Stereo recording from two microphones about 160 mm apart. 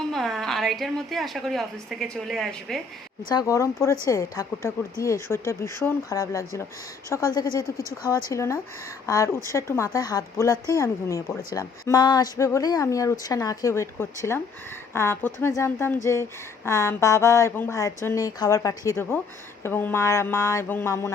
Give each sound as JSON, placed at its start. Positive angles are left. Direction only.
{"t": 0.1, "sound": "a woman's voice", "side_deg": 0}
{"t": 3.2, "sound": "a woman's voice", "side_deg": 20}
{"t": 8.3, "sound": "a woman's voice", "side_deg": 20}